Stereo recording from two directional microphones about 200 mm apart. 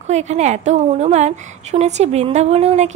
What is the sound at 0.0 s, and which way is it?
A woman's voice, 35° right (ahead or behind).